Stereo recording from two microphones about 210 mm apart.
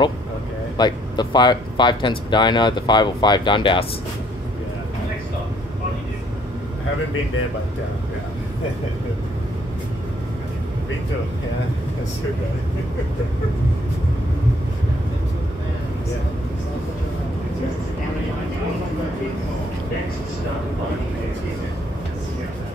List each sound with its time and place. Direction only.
0.7 s speech: 20° left (ahead or behind)